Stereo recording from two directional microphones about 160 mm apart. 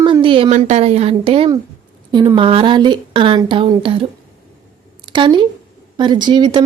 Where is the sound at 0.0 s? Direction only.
35° right (ahead or behind).